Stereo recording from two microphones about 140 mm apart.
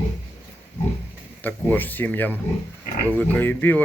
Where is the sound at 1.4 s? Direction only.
10° left (ahead or behind).